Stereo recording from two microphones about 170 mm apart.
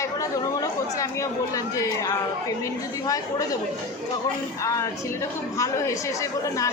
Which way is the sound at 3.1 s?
20° left (ahead or behind).